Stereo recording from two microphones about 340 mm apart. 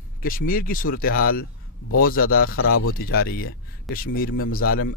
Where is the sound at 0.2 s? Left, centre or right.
Left.